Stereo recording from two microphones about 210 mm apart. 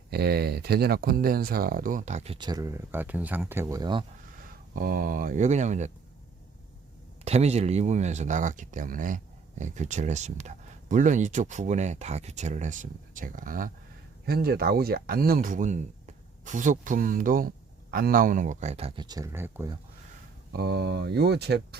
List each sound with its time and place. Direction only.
0.1 s speech: 50° right (ahead or behind); by 4.0 s 20° right (ahead or behind)
4.7 s speech: 40° right (ahead or behind)
7.3 s speech: 30° right (ahead or behind); by 19.8 s 15° right (ahead or behind)
20.5 s speech: 50° right (ahead or behind)